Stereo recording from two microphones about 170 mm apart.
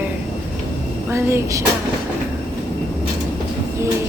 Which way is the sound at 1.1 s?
15° right (ahead or behind).